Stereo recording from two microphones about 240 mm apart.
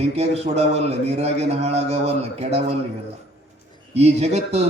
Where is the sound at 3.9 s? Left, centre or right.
Right.